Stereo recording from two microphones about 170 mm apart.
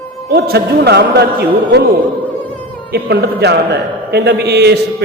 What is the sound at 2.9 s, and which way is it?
A man's voice, 70° right (ahead or behind).